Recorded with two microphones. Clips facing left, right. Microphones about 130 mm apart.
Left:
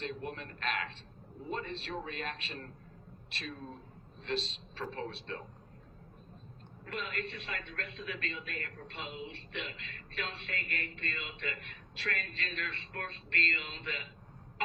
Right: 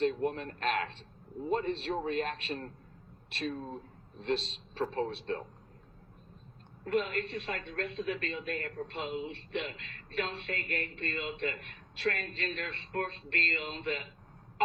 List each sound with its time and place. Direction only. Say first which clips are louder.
0.0 s a man's voice: right 10 dB; 45° right (ahead or behind)
4.2 s a man's voice: right 4 dB; 45° right (ahead or behind)
6.8 s a man's voice: right 8 dB; 40° right (ahead or behind)